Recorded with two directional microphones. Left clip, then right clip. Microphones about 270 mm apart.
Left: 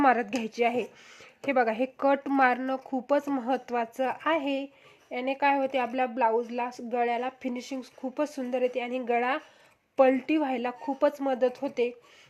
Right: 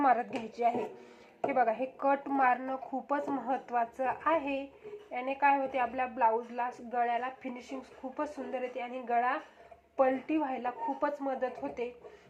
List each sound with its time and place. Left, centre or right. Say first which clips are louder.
0.1 s speech: left 3 dB; left
1.5 s a woman's voice: left 4 dB; left